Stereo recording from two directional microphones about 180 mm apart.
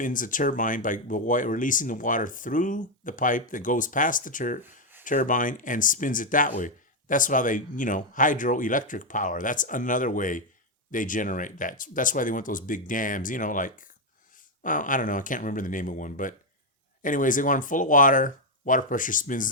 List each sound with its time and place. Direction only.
0.0 s speech: 45° left (ahead or behind)
4.6 s a sound: 10° right (ahead or behind)
5.0 s speech: 45° left (ahead or behind)